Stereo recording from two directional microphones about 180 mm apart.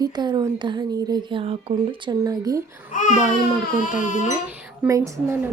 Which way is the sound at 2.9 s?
45° left (ahead or behind).